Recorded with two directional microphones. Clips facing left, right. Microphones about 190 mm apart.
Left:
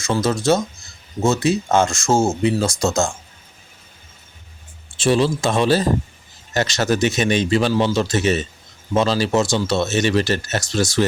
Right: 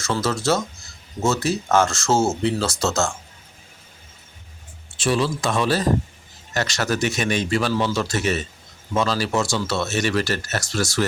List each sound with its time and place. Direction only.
0.0 s speech: 15° left (ahead or behind)
4.9 s speech: 25° left (ahead or behind)